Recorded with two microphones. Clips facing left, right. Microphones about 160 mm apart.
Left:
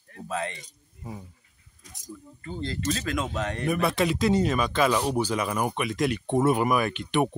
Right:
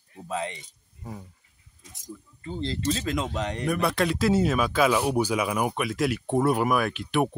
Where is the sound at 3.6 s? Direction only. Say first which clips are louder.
Left 1 dB; centre (ahead or behind).